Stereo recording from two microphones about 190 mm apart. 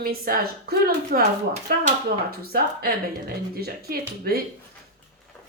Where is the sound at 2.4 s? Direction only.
55° right (ahead or behind).